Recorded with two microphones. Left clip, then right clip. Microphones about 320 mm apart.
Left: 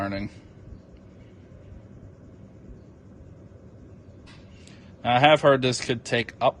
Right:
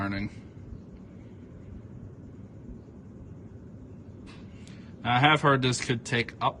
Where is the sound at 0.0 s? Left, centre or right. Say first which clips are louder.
Left 3 dB; centre.